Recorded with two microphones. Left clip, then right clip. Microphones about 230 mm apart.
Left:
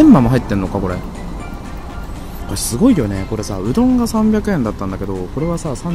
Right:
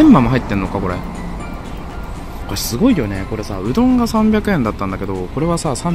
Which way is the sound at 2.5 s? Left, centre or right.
Centre.